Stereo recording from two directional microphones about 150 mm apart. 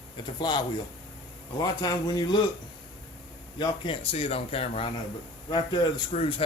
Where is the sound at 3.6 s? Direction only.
35° left (ahead or behind).